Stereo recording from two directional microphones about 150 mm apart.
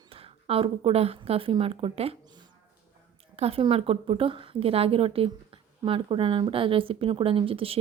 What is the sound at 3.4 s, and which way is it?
Speech, 40° right (ahead or behind).